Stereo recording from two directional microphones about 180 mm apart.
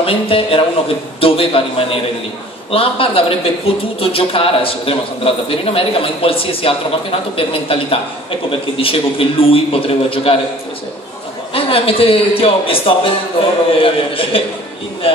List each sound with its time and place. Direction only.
0.0 s speech: 30° left (ahead or behind)
11.5 s speech: 30° left (ahead or behind)